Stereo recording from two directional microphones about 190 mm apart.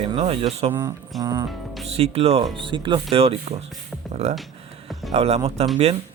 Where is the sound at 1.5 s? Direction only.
Centre (ahead or behind).